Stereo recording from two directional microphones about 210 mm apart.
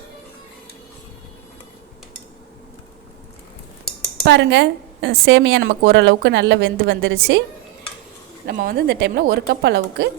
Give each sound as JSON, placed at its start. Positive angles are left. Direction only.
{"t": 4.3, "sound": "a woman's voice", "side_deg": -55}
{"t": 8.4, "sound": "a woman's voice", "side_deg": -45}